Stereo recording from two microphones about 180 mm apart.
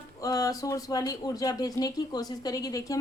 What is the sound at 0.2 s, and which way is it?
A woman's voice, 20° left (ahead or behind).